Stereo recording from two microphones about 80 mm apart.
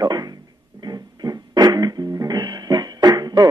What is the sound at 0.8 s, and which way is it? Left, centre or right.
Music, right.